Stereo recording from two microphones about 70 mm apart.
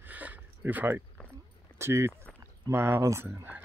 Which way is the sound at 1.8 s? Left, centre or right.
Right.